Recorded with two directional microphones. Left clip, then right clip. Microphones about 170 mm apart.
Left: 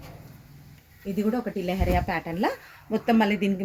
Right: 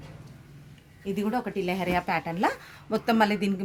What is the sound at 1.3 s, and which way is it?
Speech, 55° right (ahead or behind).